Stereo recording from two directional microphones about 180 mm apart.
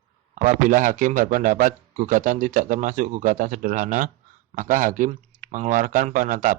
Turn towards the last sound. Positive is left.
turn(degrees=-50)  # may be behind; listen again after turning